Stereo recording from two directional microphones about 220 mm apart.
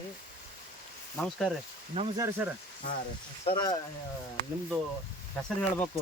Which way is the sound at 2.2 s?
10° right (ahead or behind).